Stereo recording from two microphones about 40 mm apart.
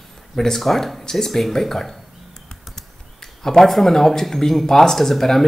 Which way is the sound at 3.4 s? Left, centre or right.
Centre.